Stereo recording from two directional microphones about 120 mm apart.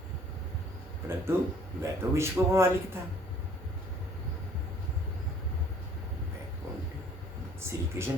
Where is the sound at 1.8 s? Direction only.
20° right (ahead or behind).